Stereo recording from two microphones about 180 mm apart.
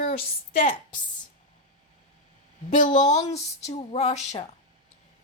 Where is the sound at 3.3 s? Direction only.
35° left (ahead or behind).